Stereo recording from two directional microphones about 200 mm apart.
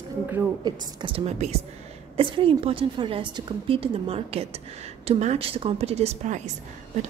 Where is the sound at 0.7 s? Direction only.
25° right (ahead or behind).